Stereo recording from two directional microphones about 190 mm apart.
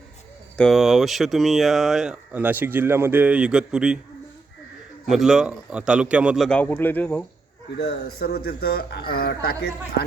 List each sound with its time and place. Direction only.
0.5 s speech: centre (ahead or behind)
5.0 s speech: centre (ahead or behind)
7.8 s a man's voice: 55° left (ahead or behind)